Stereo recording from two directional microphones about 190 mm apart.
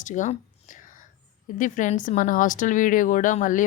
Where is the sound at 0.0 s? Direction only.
40° left (ahead or behind).